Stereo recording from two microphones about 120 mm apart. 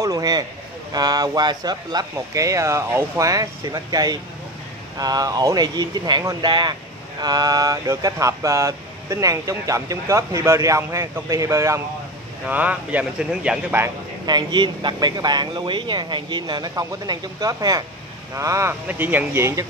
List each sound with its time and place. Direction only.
0.0 s a sound: 30° right (ahead or behind)
0.9 s speech: 35° right (ahead or behind)
7.2 s vehicle: 35° right (ahead or behind)
12.4 s speech: 15° right (ahead or behind)
14.2 s speech: 40° right (ahead or behind)
18.3 s vehicle: 25° right (ahead or behind)
18.9 s speech: 15° right (ahead or behind)